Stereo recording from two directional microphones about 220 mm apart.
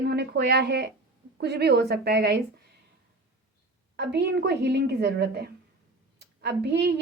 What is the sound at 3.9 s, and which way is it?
Speech, 50° right (ahead or behind).